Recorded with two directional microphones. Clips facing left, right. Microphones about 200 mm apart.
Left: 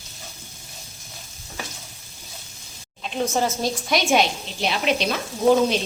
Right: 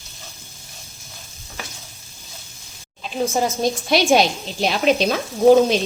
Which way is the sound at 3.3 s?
15° right (ahead or behind).